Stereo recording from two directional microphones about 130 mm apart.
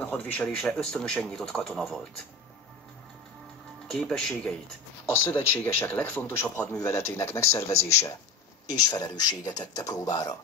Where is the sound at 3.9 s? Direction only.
5° left (ahead or behind).